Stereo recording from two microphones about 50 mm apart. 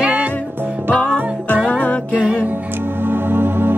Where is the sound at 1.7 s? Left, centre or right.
Left.